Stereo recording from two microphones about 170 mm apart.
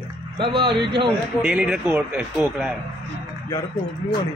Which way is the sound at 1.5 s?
5° right (ahead or behind).